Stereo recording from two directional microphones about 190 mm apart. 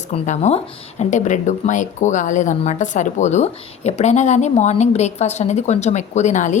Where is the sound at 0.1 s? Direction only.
35° left (ahead or behind).